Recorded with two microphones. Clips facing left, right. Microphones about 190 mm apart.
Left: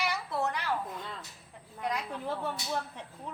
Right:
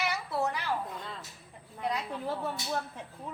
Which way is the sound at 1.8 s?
5° right (ahead or behind).